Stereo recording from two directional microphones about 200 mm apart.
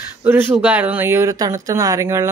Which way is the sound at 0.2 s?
10° right (ahead or behind).